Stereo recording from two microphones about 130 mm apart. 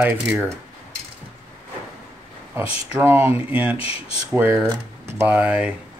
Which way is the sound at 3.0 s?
20° right (ahead or behind).